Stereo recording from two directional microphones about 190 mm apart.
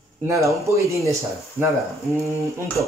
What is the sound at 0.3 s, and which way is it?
Speech, 15° right (ahead or behind).